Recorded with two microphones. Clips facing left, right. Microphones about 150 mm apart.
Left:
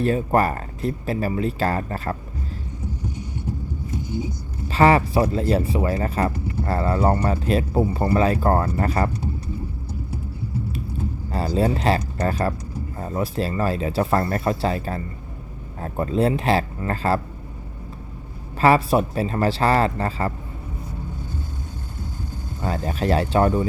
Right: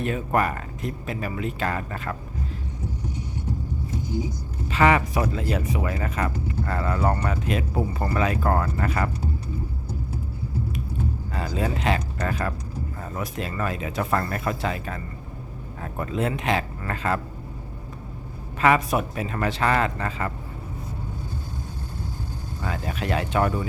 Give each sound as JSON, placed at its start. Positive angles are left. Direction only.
{"t": 0.0, "sound": "speech", "side_deg": 35}
{"t": 4.7, "sound": "speech", "side_deg": 35}
{"t": 11.3, "sound": "speech", "side_deg": 35}
{"t": 18.6, "sound": "speech", "side_deg": 30}
{"t": 22.6, "sound": "speech", "side_deg": 35}